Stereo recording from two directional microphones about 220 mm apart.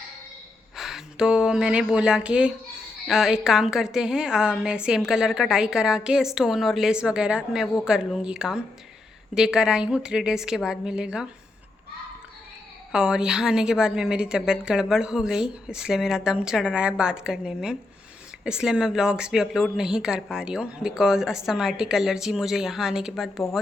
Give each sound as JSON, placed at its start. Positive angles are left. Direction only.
{"t": 0.8, "sound": "a woman's voice", "side_deg": 0}
{"t": 12.9, "sound": "a woman's voice", "side_deg": -5}